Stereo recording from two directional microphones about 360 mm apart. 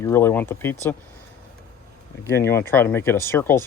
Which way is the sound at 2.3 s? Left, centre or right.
Centre.